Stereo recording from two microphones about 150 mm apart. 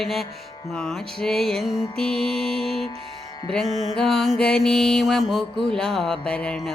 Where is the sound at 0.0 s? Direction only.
Centre (ahead or behind).